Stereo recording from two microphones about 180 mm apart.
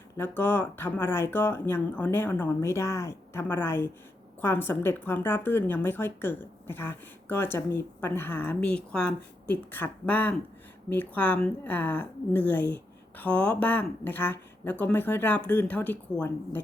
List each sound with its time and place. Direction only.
0.2 s speech: 10° left (ahead or behind)